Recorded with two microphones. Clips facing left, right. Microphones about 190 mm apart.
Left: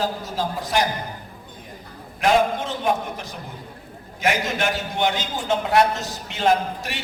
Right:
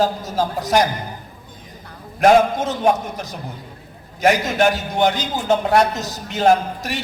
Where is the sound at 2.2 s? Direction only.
40° right (ahead or behind).